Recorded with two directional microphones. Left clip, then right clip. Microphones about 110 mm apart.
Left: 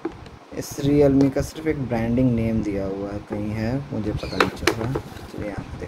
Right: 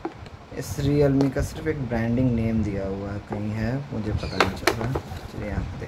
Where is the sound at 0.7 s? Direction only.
15° left (ahead or behind).